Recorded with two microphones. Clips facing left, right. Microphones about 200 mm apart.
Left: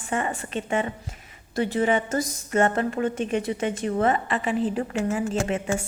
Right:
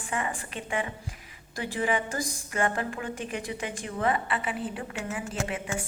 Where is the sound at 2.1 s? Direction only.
40° left (ahead or behind).